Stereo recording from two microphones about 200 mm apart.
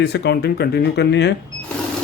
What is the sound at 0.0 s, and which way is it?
Speech, 55° left (ahead or behind).